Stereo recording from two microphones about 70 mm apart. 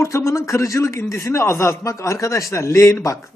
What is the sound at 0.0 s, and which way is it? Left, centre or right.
A man's voice, left.